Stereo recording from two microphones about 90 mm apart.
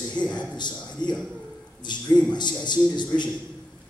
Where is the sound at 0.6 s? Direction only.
55° left (ahead or behind).